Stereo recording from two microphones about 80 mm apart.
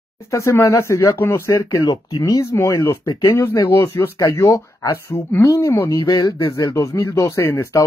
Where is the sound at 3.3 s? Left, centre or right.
Left.